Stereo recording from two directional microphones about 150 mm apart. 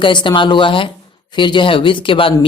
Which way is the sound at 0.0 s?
30° left (ahead or behind).